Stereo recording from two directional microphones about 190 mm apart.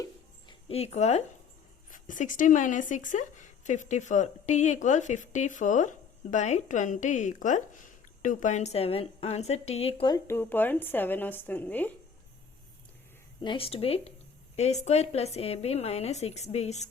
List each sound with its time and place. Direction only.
0.7 s speech: 35° left (ahead or behind)
10.2 s a woman's voice: 10° left (ahead or behind)
13.4 s speech: 25° left (ahead or behind)